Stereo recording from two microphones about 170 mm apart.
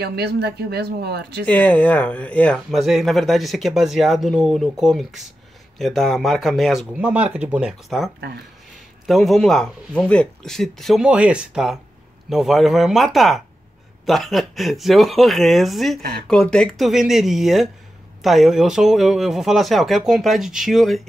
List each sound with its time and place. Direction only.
0.0 s speech: 75° right (ahead or behind)
1.4 s speech: 10° left (ahead or behind)